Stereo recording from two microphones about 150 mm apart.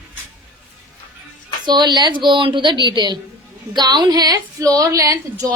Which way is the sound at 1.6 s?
30° right (ahead or behind).